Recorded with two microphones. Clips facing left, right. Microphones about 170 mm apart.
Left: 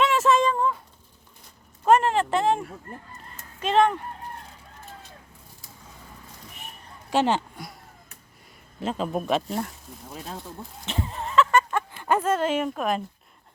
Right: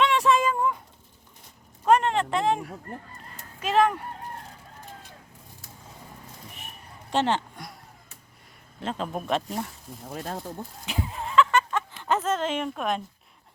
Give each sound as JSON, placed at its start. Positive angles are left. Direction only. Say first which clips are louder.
{"t": 0.0, "sound": "a sound", "louder": "left 1 dB", "side_deg": 0}
{"t": 1.8, "sound": "speech", "louder": "left 2 dB", "side_deg": 5}
{"t": 3.6, "sound": "speech", "louder": "left 2 dB", "side_deg": -5}
{"t": 7.1, "sound": "speech", "louder": "left 2 dB", "side_deg": 10}
{"t": 8.8, "sound": "speech", "louder": "left 4 dB", "side_deg": 5}
{"t": 10.1, "sound": "speech", "louder": "right 4 dB", "side_deg": -55}
{"t": 10.8, "sound": "a sound", "louder": "left 2 dB", "side_deg": -5}